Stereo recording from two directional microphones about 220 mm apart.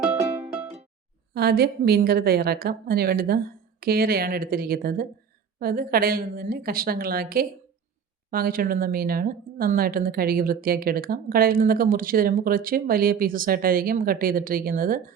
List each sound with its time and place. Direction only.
1.3 s a woman's voice: 45° right (ahead or behind)